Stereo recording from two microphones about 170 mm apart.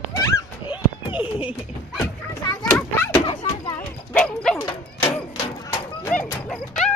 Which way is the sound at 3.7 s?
10° left (ahead or behind).